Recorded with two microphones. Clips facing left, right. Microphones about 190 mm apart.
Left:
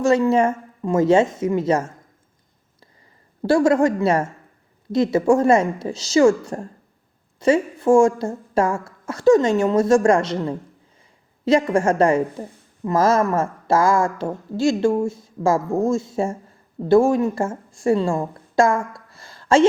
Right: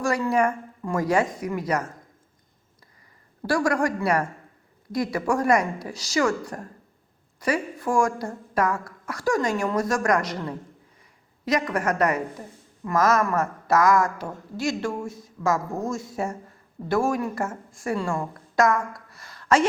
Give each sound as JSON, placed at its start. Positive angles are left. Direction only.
{"t": 0.0, "sound": "a woman's voice", "side_deg": 25}
{"t": 3.4, "sound": "a woman's voice", "side_deg": 25}